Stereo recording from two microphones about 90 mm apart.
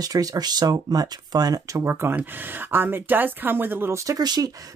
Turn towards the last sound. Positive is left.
turn(degrees=-50)  # may be behind; listen again after turning